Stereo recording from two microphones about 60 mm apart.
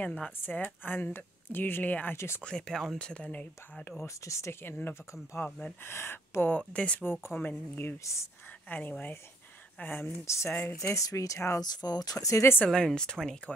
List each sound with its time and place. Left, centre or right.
0.4 s a woman's voice: left
2.1 s speech: left
2.4 s speech: centre
4.0 s a woman's voice: left
6.7 s speech: left
7.0 s a woman's voice: left
8.0 s speech: left
8.6 s speech: left
10.0 s speech: left
11.8 s speech: left
12.6 s speech: centre